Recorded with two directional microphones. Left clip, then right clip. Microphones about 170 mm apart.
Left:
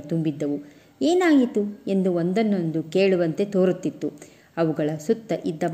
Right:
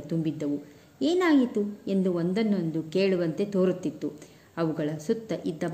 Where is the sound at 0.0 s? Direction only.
20° left (ahead or behind).